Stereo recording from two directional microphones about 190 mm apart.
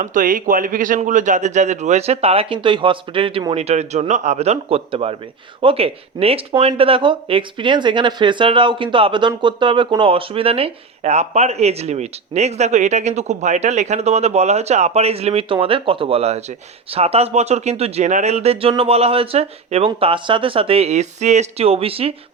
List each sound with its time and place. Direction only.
0.0 s speech: 45° right (ahead or behind)